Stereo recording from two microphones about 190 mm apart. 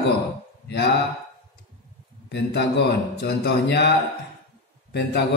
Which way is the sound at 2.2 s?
60° left (ahead or behind).